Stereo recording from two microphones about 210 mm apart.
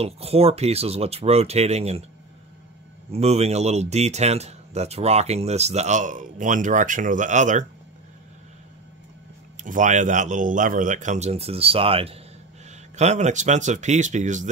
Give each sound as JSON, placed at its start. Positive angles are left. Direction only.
{"t": 0.0, "sound": "speech", "side_deg": -30}
{"t": 3.1, "sound": "speech", "side_deg": -30}
{"t": 9.6, "sound": "speech", "side_deg": -35}